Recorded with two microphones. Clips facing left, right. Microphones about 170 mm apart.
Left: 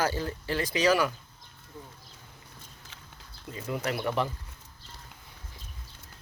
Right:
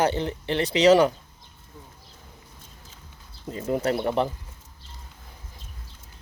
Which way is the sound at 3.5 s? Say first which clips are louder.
Right 7 dB; 40° right (ahead or behind).